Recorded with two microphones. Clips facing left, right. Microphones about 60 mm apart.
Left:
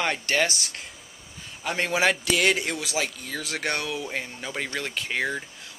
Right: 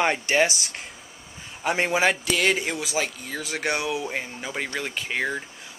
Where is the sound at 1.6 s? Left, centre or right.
Right.